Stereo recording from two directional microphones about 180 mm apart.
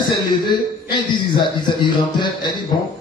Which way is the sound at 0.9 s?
25° left (ahead or behind).